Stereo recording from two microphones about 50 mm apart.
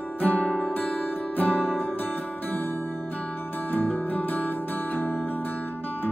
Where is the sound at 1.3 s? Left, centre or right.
Left.